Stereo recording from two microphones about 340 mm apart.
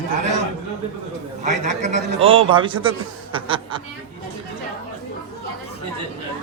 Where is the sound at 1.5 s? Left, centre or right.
Centre.